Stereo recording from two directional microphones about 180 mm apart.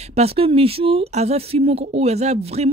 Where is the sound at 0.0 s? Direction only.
35° right (ahead or behind).